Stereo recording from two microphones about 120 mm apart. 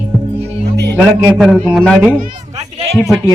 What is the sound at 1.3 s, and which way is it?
Speech, centre (ahead or behind).